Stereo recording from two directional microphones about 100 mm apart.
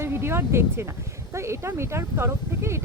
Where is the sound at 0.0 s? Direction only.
25° right (ahead or behind).